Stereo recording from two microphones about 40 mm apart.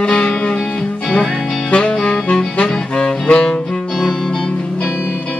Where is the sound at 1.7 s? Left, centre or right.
Left.